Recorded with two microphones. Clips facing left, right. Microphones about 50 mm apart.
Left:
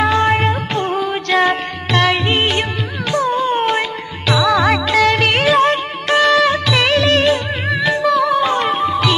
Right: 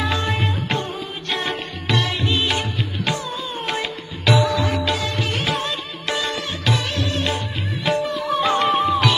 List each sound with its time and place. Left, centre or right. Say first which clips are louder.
0.0 s music: left 9 dB; left
1.3 s music: left 10 dB; left
3.5 s music: left 9 dB; left